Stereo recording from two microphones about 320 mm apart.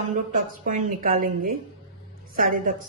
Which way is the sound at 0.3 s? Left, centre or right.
Right.